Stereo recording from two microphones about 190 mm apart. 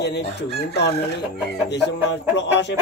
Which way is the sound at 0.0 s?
60° left (ahead or behind).